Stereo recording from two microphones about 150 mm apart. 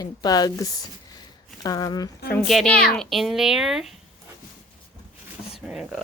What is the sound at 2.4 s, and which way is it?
Speech, 5° left (ahead or behind).